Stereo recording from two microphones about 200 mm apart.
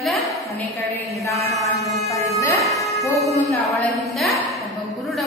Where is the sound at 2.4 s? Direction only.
15° left (ahead or behind).